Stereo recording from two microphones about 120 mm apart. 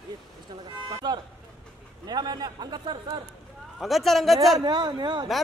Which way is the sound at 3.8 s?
Centre (ahead or behind).